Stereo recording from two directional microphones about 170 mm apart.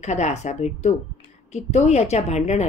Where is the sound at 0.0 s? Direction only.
40° left (ahead or behind).